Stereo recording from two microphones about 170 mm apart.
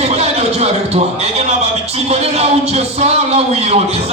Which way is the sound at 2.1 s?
40° right (ahead or behind).